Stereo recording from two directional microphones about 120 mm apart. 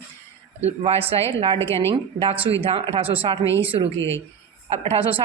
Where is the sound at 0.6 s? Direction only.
55° right (ahead or behind).